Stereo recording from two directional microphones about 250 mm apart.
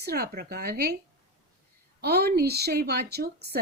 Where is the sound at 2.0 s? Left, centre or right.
Right.